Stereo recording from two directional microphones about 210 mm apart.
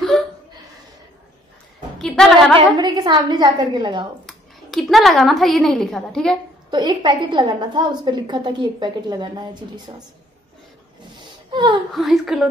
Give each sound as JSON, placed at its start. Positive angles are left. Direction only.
{"t": 2.0, "sound": "a woman's voice", "side_deg": 0}
{"t": 2.5, "sound": "a woman's voice", "side_deg": -20}
{"t": 4.3, "sound": "a woman's voice", "side_deg": 0}
{"t": 6.7, "sound": "a woman's voice", "side_deg": -20}
{"t": 11.5, "sound": "a woman's voice", "side_deg": -20}
{"t": 11.9, "sound": "a woman's voice", "side_deg": 0}